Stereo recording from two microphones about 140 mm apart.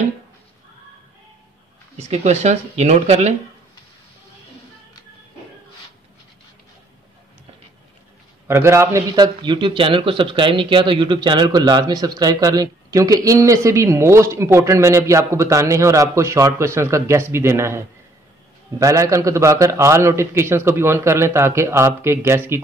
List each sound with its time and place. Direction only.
2.0 s speech: 50° right (ahead or behind)
8.5 s a man's voice: 20° right (ahead or behind)